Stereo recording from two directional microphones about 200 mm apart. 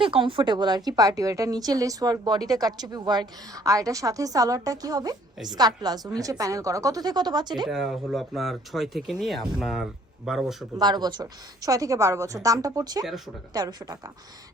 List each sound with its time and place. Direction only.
0.0 s a woman's voice: 25° right (ahead or behind)
7.7 s speech: centre (ahead or behind)
10.8 s a woman's voice: 20° right (ahead or behind)
13.1 s speech: centre (ahead or behind)
13.5 s a woman's voice: 20° right (ahead or behind)